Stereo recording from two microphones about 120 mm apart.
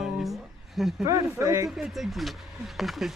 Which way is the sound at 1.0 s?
30° right (ahead or behind).